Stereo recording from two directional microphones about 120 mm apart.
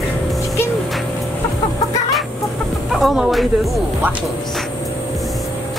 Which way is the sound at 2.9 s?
Centre (ahead or behind).